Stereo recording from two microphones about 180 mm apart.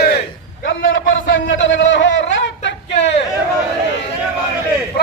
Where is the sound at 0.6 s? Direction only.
90° left.